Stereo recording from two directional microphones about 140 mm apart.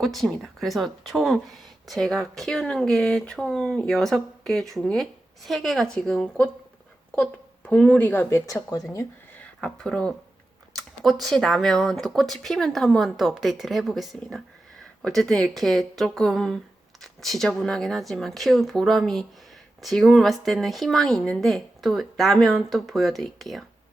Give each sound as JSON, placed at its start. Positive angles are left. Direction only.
{"t": 0.0, "sound": "speech", "side_deg": 0}
{"t": 7.7, "sound": "speech", "side_deg": 10}
{"t": 9.4, "sound": "speech", "side_deg": 5}